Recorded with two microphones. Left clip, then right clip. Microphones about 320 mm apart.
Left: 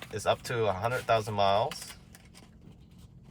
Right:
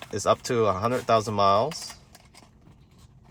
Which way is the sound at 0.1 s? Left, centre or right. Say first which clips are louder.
Right 6 dB; right.